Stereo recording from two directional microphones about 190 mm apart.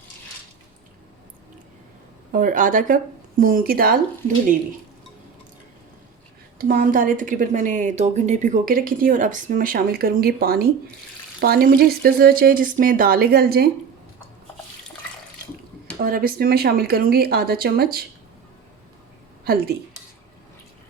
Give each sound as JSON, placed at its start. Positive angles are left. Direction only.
{"t": 2.3, "sound": "a woman's voice", "side_deg": -45}
{"t": 6.6, "sound": "a woman's voice", "side_deg": -50}
{"t": 16.0, "sound": "a woman's voice", "side_deg": -50}
{"t": 19.5, "sound": "speech", "side_deg": -55}